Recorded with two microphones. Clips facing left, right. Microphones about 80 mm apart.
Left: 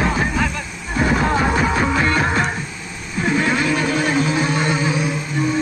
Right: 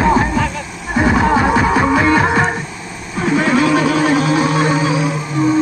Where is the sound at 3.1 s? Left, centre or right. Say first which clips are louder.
Right 4 dB; right.